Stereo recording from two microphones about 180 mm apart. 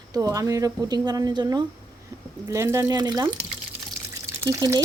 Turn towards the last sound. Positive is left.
turn(degrees=-20)  # may be behind; listen again after turning